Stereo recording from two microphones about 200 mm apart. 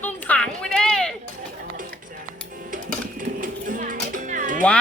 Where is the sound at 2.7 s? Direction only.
40° right (ahead or behind).